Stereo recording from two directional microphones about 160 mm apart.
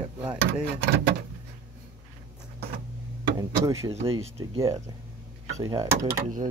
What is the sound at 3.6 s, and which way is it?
Speech, 20° right (ahead or behind).